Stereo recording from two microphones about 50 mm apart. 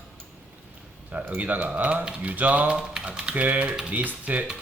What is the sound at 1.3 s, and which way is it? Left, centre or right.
A man's voice, right.